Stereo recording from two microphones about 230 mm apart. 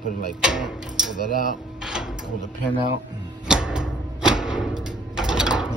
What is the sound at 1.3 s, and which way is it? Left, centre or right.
Speech, left.